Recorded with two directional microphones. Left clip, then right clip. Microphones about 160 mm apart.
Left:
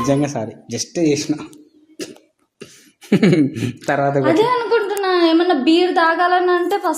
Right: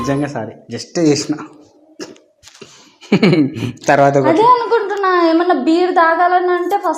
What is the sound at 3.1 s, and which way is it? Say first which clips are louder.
Speech: right 2 dB; 20° left (ahead or behind).